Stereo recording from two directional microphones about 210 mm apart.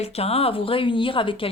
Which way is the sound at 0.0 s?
30° left (ahead or behind).